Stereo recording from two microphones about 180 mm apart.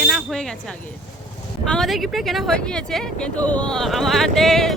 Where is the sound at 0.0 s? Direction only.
Centre (ahead or behind).